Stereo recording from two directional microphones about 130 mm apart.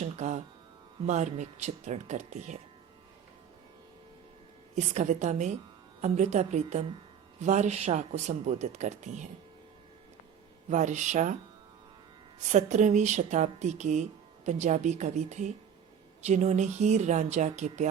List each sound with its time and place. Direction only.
0.0 s music: 65° right (ahead or behind)
1.0 s speech: 65° right (ahead or behind)
4.7 s speech: 65° right (ahead or behind)
10.7 s speech: 70° right (ahead or behind)
12.5 s speech: 65° right (ahead or behind)